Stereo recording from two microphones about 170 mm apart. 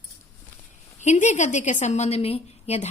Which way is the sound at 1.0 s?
45° left (ahead or behind).